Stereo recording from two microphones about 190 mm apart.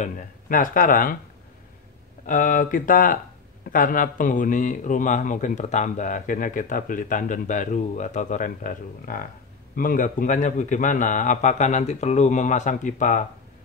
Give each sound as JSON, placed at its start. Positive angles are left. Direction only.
{"t": 0.0, "sound": "speech", "side_deg": 45}
{"t": 2.2, "sound": "a man's voice", "side_deg": 45}